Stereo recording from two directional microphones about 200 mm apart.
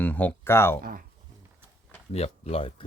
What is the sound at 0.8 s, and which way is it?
Speech, 45° right (ahead or behind).